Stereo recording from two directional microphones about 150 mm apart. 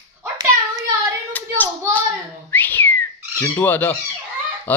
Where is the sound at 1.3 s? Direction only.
10° left (ahead or behind).